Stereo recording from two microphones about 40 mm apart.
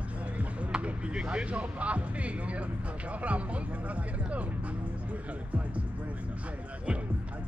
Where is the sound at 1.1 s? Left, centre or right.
Right.